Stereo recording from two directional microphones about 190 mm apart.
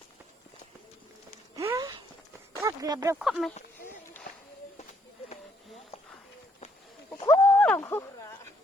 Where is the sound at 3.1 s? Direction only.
Centre (ahead or behind).